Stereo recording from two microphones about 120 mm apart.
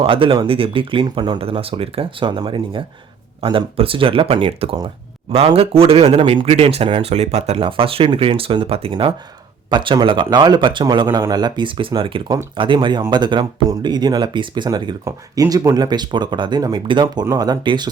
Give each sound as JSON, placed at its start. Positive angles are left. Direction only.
{"t": 0.0, "sound": "speech", "side_deg": -45}
{"t": 1.4, "sound": "speech", "side_deg": -50}